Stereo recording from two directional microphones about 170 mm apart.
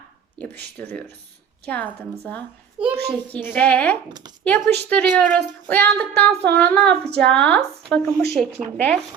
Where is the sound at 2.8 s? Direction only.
5° right (ahead or behind).